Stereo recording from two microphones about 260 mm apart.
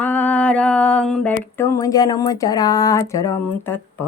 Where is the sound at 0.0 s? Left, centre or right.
Centre.